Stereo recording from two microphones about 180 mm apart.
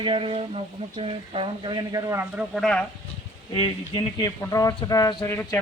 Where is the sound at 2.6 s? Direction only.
5° left (ahead or behind).